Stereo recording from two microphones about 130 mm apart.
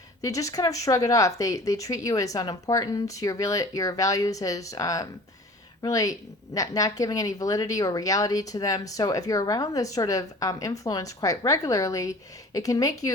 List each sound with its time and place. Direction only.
0.2 s speech: 25° left (ahead or behind)